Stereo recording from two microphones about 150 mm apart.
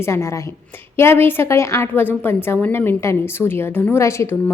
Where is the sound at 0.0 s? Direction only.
20° left (ahead or behind).